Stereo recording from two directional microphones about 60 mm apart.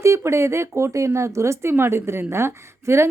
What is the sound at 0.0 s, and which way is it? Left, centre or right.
A woman's voice, right.